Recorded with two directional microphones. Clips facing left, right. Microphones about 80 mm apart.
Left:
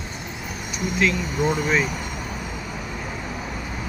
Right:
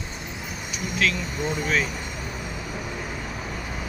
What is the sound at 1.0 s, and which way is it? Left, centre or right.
Speech, centre.